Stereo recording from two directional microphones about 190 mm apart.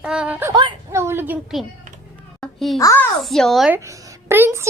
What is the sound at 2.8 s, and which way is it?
Speech, 20° left (ahead or behind).